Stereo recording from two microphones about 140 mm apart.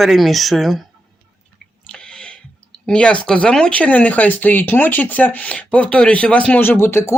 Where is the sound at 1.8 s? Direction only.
5° left (ahead or behind).